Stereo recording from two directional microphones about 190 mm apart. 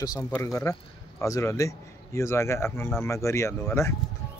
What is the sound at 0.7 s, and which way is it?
Speech, 15° left (ahead or behind).